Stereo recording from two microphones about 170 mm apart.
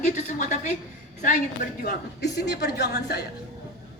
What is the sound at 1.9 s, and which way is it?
Speech, 75° left (ahead or behind).